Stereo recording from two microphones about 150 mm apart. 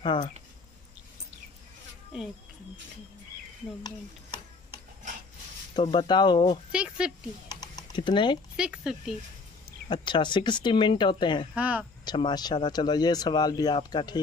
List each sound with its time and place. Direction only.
0.0 s speech: 35° left (ahead or behind)
5.8 s speech: 30° left (ahead or behind)
6.7 s speech: 5° right (ahead or behind)
7.6 s typing: 30° left (ahead or behind)
8.5 s speech: 5° right (ahead or behind)
9.8 s speech: 35° left (ahead or behind)
11.5 s speech: 10° right (ahead or behind)
12.0 s speech: 30° left (ahead or behind)